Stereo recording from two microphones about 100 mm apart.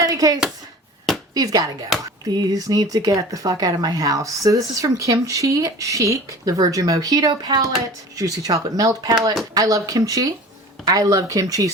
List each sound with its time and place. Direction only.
0.0 s speech: 35° right (ahead or behind)